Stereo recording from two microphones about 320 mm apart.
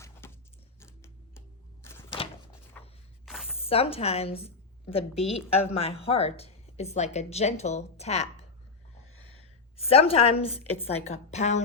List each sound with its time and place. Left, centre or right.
0.2 s a sound: centre
3.6 s a woman's voice: centre
9.7 s a woman's voice: centre